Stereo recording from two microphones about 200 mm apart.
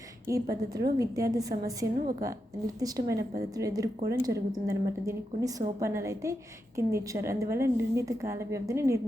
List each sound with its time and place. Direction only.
0.3 s a woman's voice: 15° right (ahead or behind)